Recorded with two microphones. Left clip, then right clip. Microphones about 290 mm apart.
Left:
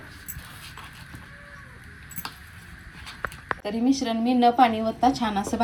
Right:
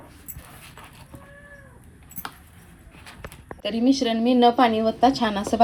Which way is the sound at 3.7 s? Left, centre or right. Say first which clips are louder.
Right 5 dB; centre.